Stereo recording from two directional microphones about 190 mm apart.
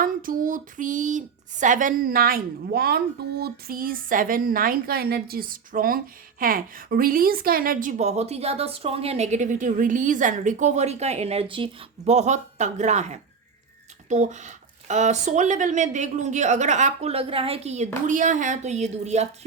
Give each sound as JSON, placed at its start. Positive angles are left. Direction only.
{"t": 0.0, "sound": "a woman's voice", "side_deg": -45}